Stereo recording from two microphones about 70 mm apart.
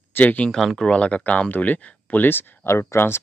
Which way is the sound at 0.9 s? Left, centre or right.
Centre.